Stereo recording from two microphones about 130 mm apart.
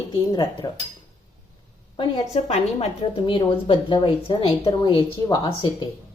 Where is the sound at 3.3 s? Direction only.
40° left (ahead or behind).